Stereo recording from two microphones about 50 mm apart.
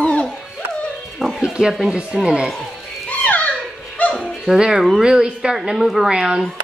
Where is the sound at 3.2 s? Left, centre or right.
Left.